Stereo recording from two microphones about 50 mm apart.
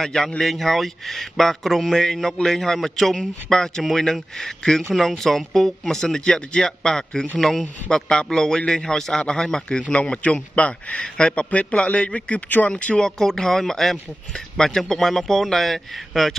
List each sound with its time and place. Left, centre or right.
0.0 s speech: centre
7.9 s a man's voice: centre; by 12.7 s left
12.7 s speech: left; by 16.3 s centre